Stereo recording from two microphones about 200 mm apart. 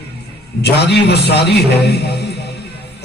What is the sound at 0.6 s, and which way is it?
Music, 55° left (ahead or behind).